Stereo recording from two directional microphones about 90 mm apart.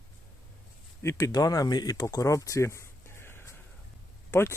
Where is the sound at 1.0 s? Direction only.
40° left (ahead or behind).